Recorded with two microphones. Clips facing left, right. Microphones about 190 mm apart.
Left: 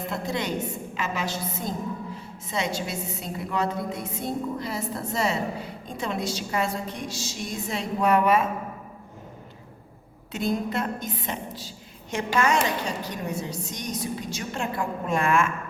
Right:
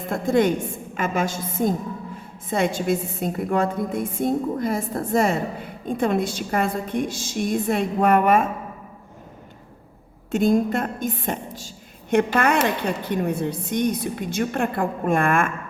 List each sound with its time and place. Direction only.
0.1 s a woman's voice: 50° right (ahead or behind)
10.3 s a woman's voice: 50° right (ahead or behind)